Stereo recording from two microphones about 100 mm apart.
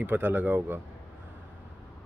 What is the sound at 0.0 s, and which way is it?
Speech, 20° right (ahead or behind).